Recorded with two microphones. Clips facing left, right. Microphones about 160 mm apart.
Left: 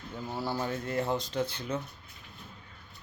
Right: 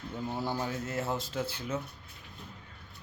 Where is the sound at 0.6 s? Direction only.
5° right (ahead or behind).